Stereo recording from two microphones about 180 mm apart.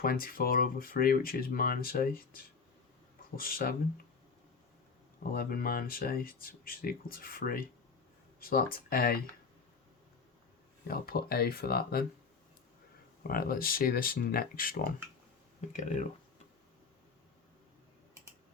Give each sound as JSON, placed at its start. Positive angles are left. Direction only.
{"t": 0.0, "sound": "speech", "side_deg": 55}
{"t": 5.2, "sound": "speech", "side_deg": 55}
{"t": 10.8, "sound": "speech", "side_deg": 55}
{"t": 13.2, "sound": "speech", "side_deg": 55}